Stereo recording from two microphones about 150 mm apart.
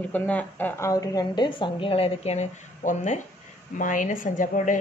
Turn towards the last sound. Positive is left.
turn(degrees=60)  # may be behind; listen again after turning